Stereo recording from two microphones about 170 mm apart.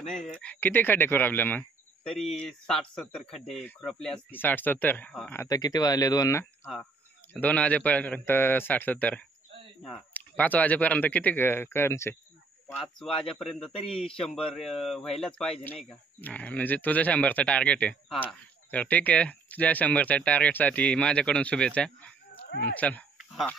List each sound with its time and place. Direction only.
0.0 s speech: 5° left (ahead or behind)
5.4 s speech: 20° left (ahead or behind)
7.3 s speech: 10° left (ahead or behind)
12.7 s speech: centre (ahead or behind)